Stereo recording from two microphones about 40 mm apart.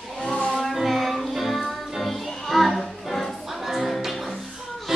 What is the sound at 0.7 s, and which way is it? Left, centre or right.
Music, centre.